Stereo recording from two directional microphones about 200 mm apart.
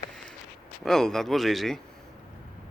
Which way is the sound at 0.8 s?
Centre (ahead or behind).